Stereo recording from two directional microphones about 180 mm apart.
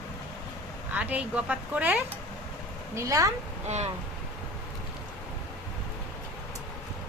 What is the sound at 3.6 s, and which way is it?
Speech, 40° right (ahead or behind).